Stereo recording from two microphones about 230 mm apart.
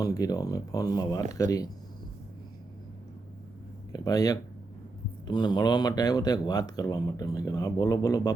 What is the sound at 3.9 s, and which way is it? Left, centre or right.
Speech, centre.